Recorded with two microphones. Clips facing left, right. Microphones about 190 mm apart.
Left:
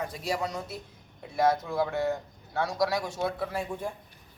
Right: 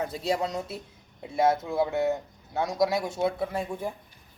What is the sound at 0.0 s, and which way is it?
Speech, 25° right (ahead or behind).